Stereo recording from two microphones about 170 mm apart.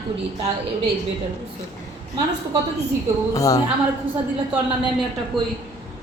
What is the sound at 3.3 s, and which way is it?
Speech, 20° left (ahead or behind).